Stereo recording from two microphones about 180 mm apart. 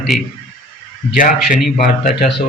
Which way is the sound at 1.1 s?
50° left (ahead or behind).